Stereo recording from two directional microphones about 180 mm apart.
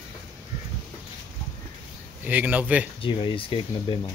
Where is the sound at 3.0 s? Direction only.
30° left (ahead or behind).